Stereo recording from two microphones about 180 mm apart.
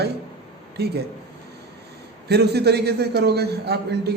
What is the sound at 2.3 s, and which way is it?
A man's voice, 65° right (ahead or behind).